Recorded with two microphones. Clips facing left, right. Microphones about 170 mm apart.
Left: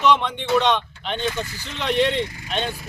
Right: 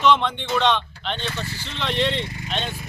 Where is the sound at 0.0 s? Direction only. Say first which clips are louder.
Even; 10° left (ahead or behind).